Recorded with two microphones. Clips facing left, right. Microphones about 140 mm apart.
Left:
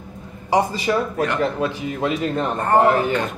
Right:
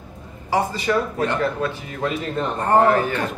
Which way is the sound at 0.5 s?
15° left (ahead or behind).